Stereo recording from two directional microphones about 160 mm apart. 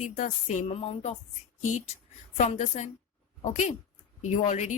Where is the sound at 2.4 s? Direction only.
45° left (ahead or behind).